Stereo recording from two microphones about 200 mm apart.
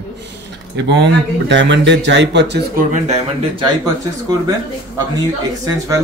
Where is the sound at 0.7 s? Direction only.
65° right (ahead or behind).